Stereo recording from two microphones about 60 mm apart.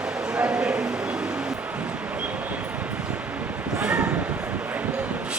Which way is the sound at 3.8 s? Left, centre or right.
Centre.